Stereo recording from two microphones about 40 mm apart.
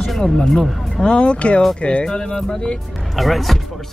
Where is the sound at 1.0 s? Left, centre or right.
Left.